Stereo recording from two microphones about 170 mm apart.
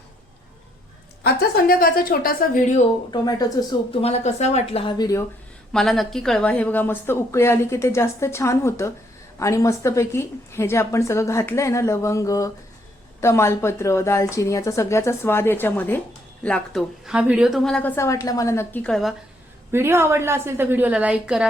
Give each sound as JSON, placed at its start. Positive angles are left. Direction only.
{"t": 1.2, "sound": "a woman's voice", "side_deg": 65}
{"t": 3.1, "sound": "speech", "side_deg": 25}
{"t": 5.7, "sound": "speech", "side_deg": 0}
{"t": 17.1, "sound": "speech", "side_deg": -5}
{"t": 19.7, "sound": "a woman's voice", "side_deg": -15}